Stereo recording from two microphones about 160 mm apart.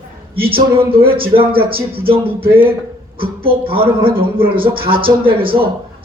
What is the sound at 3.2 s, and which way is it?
A man's voice, 35° right (ahead or behind).